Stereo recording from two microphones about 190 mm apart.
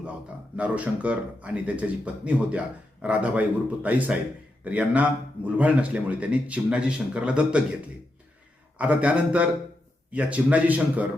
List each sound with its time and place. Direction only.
0.5 s speech: 5° right (ahead or behind)
8.8 s speech: 5° right (ahead or behind)